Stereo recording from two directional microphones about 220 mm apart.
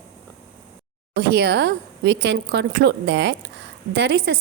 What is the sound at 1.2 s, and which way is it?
A woman's voice, 45° right (ahead or behind).